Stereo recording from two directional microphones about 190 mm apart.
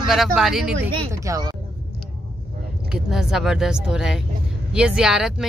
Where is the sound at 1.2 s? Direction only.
15° right (ahead or behind).